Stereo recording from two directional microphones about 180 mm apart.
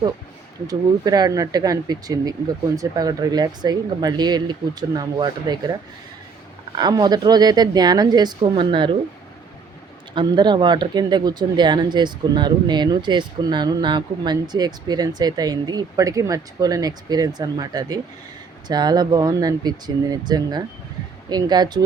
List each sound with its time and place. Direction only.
0.7 s speech: 20° right (ahead or behind)
6.7 s speech: 25° right (ahead or behind)
10.2 s speech: 25° right (ahead or behind)